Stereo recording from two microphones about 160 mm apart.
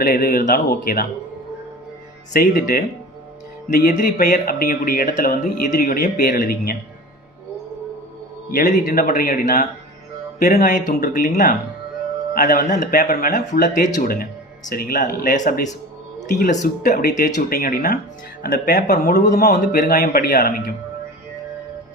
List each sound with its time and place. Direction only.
0.0 s a man's voice: 65° left (ahead or behind)
2.3 s speech: 70° left (ahead or behind)
8.5 s speech: 60° left (ahead or behind)
11.0 s speech: 70° left (ahead or behind)
13.4 s a man's voice: 55° left (ahead or behind); by 20.7 s 70° left (ahead or behind)